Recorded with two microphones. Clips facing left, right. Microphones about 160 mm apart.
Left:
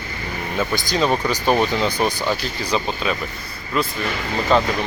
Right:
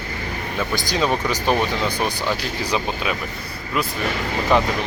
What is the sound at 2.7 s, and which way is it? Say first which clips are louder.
Speech: left 2 dB; 10° right (ahead or behind).